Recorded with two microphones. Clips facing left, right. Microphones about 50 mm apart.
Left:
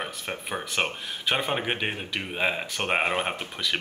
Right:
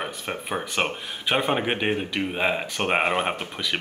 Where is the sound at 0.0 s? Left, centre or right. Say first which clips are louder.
Right 2 dB; centre.